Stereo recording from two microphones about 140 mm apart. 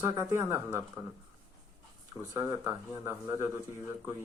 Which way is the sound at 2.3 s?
20° right (ahead or behind).